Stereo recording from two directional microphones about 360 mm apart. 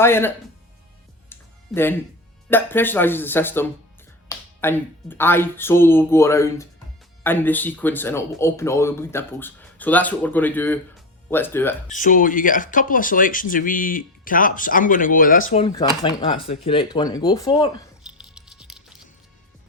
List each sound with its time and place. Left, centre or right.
0.0 s speech: centre
1.3 s music: centre
2.5 s speech: centre
11.9 s speech: left
18.2 s music: centre